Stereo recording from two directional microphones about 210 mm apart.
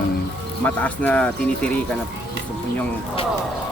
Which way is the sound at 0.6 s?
5° left (ahead or behind).